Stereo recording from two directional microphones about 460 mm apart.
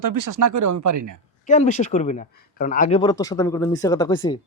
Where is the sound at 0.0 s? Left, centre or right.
Right.